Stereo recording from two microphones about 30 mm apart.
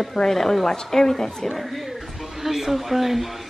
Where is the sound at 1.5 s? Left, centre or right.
Centre.